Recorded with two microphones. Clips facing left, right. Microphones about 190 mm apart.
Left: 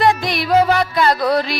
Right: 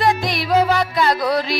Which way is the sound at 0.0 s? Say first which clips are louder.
Left 2 dB; 65° left (ahead or behind).